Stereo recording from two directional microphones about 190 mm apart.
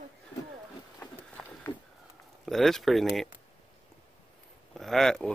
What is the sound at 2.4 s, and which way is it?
Speech, centre (ahead or behind).